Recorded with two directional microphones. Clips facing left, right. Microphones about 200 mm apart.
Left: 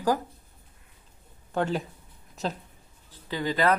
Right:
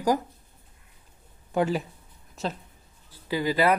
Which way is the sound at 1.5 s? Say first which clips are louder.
Right 2 dB; 10° right (ahead or behind).